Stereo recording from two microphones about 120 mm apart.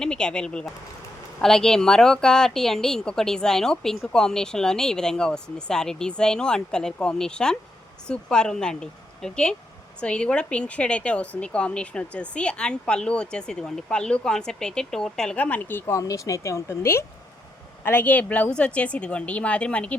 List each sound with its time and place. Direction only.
0.0 s a woman's voice: 5° left (ahead or behind)
16.0 s a woman's voice: 30° left (ahead or behind); by 20.0 s 10° left (ahead or behind)